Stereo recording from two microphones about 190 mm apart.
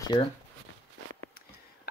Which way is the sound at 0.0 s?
25° left (ahead or behind).